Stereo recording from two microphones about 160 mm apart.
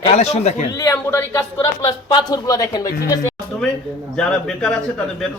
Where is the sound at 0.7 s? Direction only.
20° left (ahead or behind).